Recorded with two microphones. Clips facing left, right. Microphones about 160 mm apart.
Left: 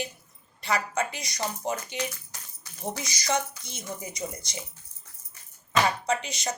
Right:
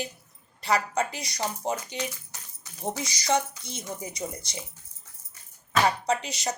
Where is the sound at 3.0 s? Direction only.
30° right (ahead or behind).